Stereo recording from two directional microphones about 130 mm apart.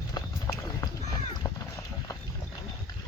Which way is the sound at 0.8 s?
30° left (ahead or behind).